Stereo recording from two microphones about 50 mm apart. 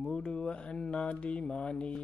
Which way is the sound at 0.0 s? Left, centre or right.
Centre.